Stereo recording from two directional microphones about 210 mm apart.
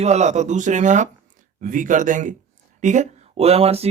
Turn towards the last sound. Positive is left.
turn(degrees=-30)  # may be behind; listen again after turning